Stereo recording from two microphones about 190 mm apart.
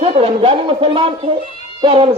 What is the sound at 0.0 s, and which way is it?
A man's voice, 30° right (ahead or behind).